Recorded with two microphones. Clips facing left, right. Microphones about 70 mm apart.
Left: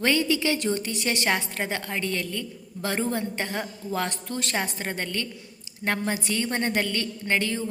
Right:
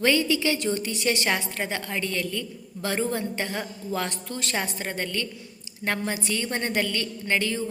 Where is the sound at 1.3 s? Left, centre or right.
Left.